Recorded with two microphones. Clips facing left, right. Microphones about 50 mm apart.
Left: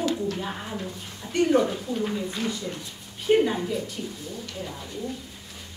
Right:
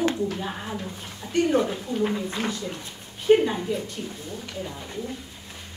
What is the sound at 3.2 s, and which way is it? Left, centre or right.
Speech, centre.